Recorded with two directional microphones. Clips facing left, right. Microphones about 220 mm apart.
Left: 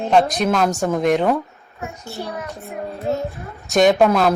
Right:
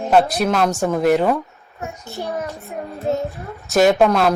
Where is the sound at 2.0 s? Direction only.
15° right (ahead or behind).